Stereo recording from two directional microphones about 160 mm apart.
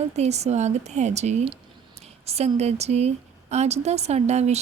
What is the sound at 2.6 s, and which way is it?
Speech, 40° right (ahead or behind).